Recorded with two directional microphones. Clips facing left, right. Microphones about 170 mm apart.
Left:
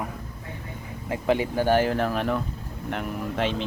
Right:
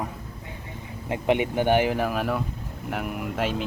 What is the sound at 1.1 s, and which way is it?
Speech, 20° right (ahead or behind).